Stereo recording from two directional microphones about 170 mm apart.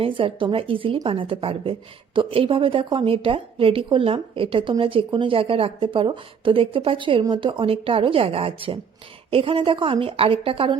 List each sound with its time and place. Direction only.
0.0 s a woman's voice: 30° right (ahead or behind)